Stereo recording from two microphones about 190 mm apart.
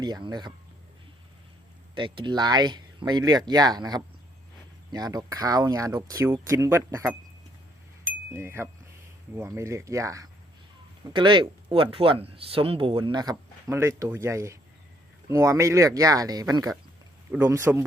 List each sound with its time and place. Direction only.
0.0 s speech: 20° right (ahead or behind)
2.0 s speech: 25° right (ahead or behind)
8.3 s speech: 15° right (ahead or behind)